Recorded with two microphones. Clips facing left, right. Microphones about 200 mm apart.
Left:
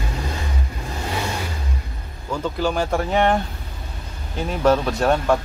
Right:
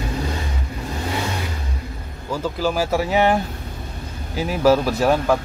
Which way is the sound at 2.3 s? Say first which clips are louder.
Even; 5° right (ahead or behind).